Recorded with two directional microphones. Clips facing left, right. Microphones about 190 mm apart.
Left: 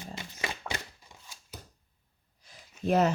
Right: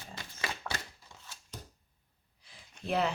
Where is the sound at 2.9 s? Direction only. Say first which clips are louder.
Left 6 dB; 45° left (ahead or behind).